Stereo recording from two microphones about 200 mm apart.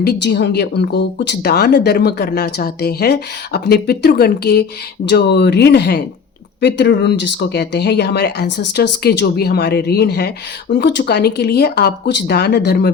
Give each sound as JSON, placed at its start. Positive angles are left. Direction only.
{"t": 0.0, "sound": "speech", "side_deg": 55}